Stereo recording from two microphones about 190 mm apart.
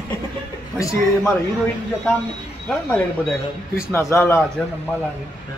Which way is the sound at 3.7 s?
15° left (ahead or behind).